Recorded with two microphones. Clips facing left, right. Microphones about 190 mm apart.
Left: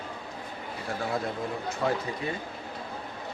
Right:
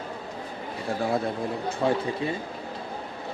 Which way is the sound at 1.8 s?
25° right (ahead or behind).